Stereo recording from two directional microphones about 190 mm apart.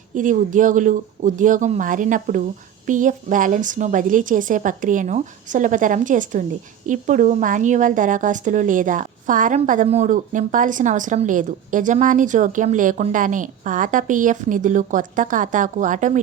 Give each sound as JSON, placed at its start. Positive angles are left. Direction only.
{"t": 0.1, "sound": "a woman's voice", "side_deg": -40}